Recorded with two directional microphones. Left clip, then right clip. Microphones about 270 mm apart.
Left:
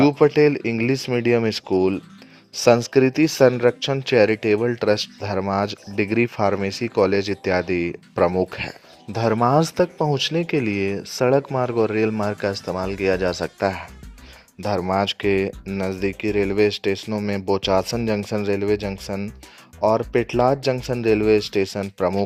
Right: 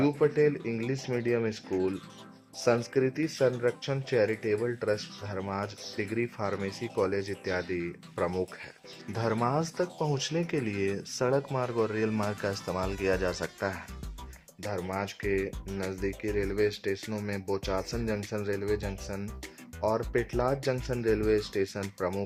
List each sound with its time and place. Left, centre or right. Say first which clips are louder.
0.0 s speech: left 10 dB; left